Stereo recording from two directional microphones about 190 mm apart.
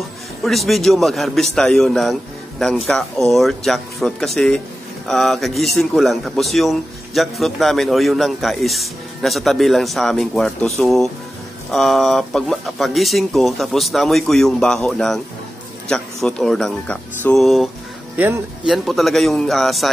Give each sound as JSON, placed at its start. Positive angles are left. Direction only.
{"t": 0.4, "sound": "a man's voice", "side_deg": 0}
{"t": 18.1, "sound": "speech", "side_deg": -10}
{"t": 18.7, "sound": "a man's voice", "side_deg": 0}